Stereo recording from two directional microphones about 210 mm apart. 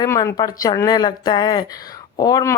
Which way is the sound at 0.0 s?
15° left (ahead or behind).